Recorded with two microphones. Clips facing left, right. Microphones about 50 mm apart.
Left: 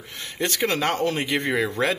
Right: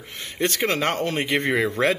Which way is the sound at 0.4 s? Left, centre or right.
Centre.